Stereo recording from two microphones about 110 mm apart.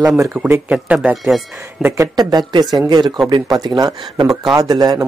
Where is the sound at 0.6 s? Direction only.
10° right (ahead or behind).